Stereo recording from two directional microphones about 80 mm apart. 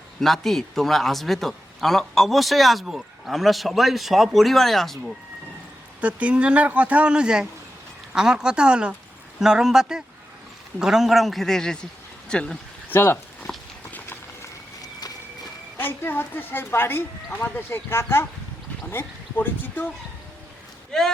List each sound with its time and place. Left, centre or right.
0.2 s a man's voice: centre
6.0 s a man's voice: centre
12.9 s speech: left
13.5 s horse: centre
14.4 s run: left
15.8 s speech: left
20.9 s a man's voice: centre